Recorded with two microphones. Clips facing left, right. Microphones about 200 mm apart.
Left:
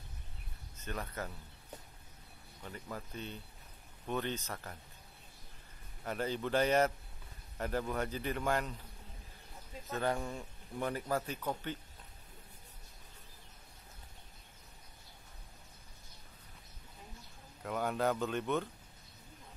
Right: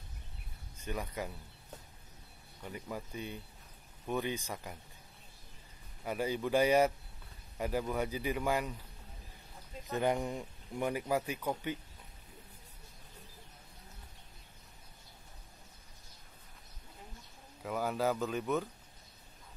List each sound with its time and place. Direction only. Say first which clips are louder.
0.7 s speech: right 2 dB; 10° right (ahead or behind)
2.6 s speech: right 3 dB; 10° right (ahead or behind)
6.0 s speech: right 2 dB; 10° right (ahead or behind)
9.8 s speech: right 3 dB; 15° right (ahead or behind)
17.6 s speech: right 1 dB; 5° right (ahead or behind)